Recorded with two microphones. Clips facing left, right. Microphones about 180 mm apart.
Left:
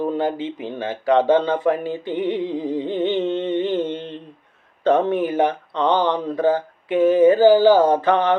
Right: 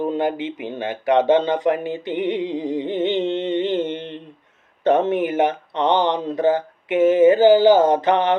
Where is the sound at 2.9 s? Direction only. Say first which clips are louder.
Even; 75° right (ahead or behind).